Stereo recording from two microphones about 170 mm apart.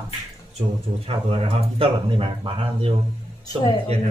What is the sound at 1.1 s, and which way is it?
Speech, 35° right (ahead or behind).